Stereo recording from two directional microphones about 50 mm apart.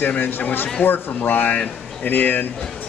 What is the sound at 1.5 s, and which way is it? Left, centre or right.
Speech, left.